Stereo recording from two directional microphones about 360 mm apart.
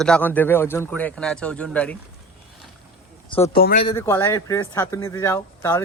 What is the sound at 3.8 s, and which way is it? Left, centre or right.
Speech, centre.